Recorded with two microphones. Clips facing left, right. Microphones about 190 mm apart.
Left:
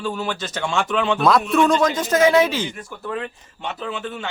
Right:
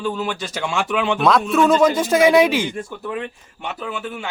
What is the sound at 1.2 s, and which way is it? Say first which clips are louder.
A man's voice: right 1 dB; centre (ahead or behind).